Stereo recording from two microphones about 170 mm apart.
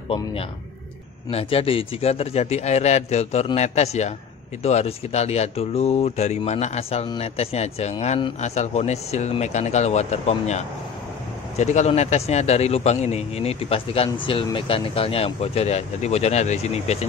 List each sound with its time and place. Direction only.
0.1 s a man's voice: 35° left (ahead or behind)